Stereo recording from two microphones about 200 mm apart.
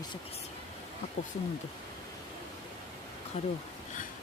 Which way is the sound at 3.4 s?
30° left (ahead or behind).